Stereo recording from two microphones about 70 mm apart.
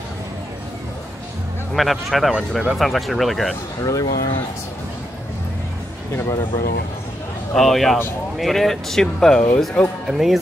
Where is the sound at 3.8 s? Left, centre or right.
Left.